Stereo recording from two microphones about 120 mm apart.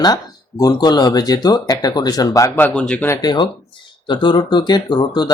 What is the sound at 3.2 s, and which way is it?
Speech, 35° left (ahead or behind).